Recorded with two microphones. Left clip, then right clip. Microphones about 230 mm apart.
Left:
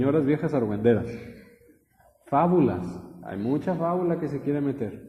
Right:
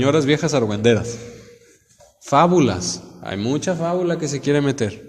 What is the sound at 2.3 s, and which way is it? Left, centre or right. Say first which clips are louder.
Speech: right 7 dB; right.